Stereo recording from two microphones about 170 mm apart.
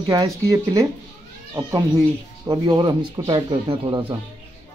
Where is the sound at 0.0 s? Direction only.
25° right (ahead or behind).